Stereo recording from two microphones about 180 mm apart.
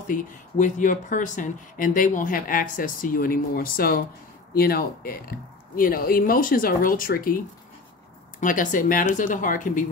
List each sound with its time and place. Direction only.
0.1 s speech: 45° left (ahead or behind)
8.4 s speech: 45° left (ahead or behind)